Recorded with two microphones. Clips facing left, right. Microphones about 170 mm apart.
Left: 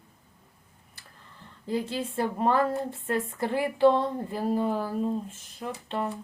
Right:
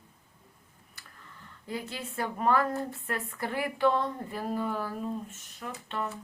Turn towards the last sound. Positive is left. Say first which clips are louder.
# left 4 dB
turn(degrees=30)  # may be behind; listen again after turning